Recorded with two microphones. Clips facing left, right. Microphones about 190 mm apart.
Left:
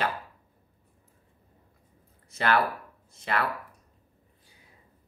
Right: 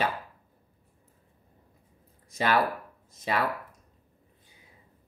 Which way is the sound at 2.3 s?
10° right (ahead or behind).